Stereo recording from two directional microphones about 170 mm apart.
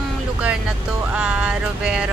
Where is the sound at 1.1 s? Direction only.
5° right (ahead or behind).